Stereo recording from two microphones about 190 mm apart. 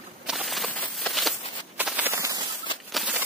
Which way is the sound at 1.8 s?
10° right (ahead or behind).